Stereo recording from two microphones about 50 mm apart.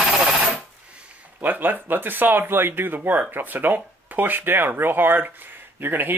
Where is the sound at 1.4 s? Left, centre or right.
Right.